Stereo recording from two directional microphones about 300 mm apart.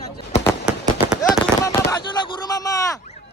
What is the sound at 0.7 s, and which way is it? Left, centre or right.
Firecracker, centre.